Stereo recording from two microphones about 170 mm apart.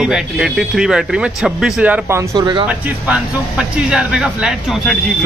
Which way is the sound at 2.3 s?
25° right (ahead or behind).